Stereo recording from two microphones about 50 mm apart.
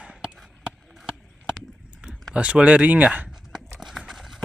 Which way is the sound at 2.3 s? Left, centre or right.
Right.